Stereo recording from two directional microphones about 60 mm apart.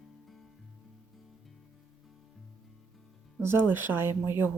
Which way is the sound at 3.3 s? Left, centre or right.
Right.